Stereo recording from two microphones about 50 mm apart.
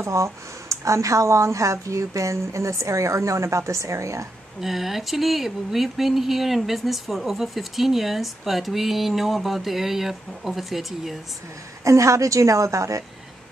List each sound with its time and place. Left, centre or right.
0.0 s speech: right
4.6 s speech: centre
11.8 s speech: right